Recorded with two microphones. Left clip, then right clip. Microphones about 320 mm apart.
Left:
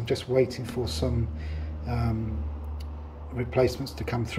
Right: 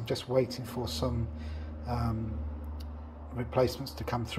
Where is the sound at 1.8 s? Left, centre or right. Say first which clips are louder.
Left 2 dB; right.